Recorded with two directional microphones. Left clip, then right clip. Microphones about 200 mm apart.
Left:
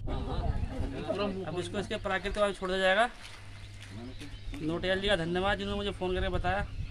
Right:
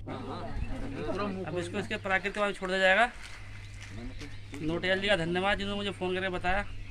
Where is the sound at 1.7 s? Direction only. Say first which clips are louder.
Right 3 dB; 10° left (ahead or behind).